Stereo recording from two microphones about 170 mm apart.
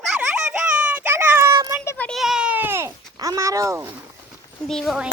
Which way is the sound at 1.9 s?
5° left (ahead or behind).